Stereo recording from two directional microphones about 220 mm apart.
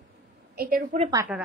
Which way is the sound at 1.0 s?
20° right (ahead or behind).